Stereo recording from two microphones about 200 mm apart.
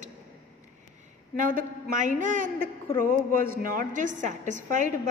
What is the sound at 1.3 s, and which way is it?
A woman's voice, 45° right (ahead or behind).